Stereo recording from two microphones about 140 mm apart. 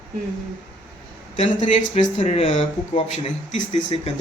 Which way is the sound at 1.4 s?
55° left (ahead or behind).